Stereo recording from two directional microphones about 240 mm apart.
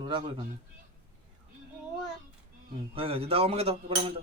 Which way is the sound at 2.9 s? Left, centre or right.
Right.